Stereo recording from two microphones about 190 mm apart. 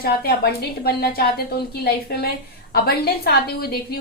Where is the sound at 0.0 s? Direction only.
55° left (ahead or behind).